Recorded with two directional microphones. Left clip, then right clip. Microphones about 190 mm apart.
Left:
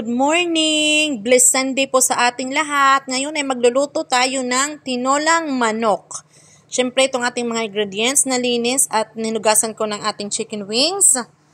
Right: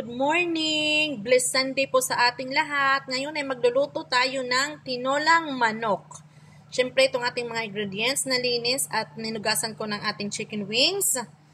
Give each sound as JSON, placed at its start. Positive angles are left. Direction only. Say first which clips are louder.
{"t": 0.1, "sound": "a woman's voice", "louder": "left 7 dB", "side_deg": 40}